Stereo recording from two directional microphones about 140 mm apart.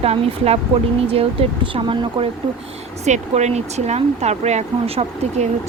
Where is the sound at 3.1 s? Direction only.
55° right (ahead or behind).